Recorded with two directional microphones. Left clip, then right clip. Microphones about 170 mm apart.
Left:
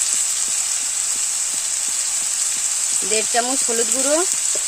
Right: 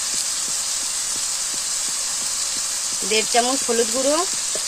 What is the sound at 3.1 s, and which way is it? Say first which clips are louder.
Speech: right 2 dB; 35° left (ahead or behind).